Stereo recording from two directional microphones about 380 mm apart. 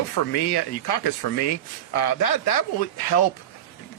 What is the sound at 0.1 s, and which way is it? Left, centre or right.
A man's voice, left.